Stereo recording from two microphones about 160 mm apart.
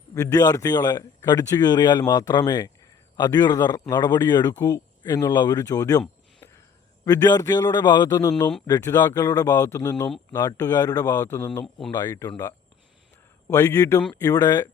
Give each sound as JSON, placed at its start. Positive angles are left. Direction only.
{"t": 0.1, "sound": "speech", "side_deg": 20}
{"t": 13.5, "sound": "speech", "side_deg": 15}